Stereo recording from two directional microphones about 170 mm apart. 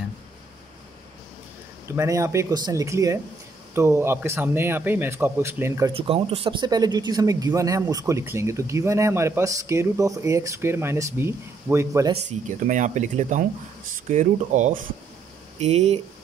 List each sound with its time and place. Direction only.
1.9 s speech: 15° right (ahead or behind)
5.9 s speech: 35° right (ahead or behind); by 12.1 s 15° right (ahead or behind)
12.1 s speech: 45° right (ahead or behind)